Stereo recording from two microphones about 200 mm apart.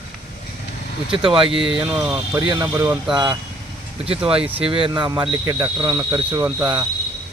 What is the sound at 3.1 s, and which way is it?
Speech, 20° right (ahead or behind).